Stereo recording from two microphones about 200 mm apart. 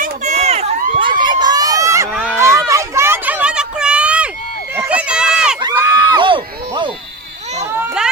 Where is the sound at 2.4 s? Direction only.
15° right (ahead or behind).